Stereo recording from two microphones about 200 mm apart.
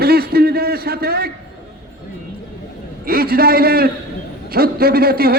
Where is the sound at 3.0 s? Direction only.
50° right (ahead or behind).